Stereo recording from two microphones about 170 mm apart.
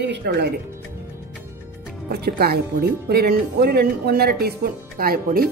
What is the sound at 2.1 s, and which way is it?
Speech, 70° right (ahead or behind).